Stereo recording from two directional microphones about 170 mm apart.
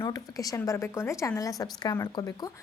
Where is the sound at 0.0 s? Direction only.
20° left (ahead or behind).